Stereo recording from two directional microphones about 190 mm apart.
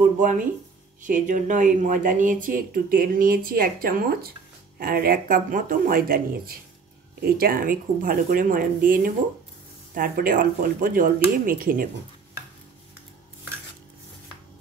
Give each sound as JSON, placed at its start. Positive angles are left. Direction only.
{"t": 0.0, "sound": "speech", "side_deg": -45}